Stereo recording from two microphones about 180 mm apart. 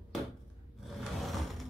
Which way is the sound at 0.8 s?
Centre (ahead or behind).